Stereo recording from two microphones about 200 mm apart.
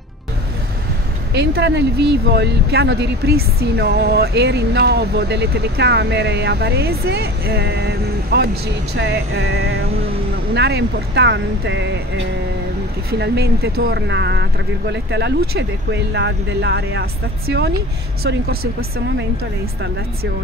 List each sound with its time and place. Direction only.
1.3 s speech: 60° right (ahead or behind)
18.6 s speech: 90° right